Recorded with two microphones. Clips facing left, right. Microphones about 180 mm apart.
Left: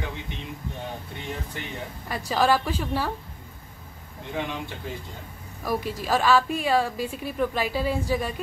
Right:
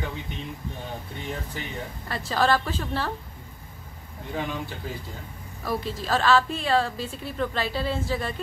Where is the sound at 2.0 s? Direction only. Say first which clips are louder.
Left 1 dB; 10° left (ahead or behind).